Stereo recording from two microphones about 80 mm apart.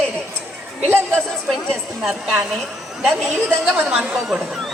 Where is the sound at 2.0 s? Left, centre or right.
Centre.